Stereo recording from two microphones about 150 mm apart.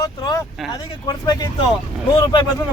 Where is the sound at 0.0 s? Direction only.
25° left (ahead or behind).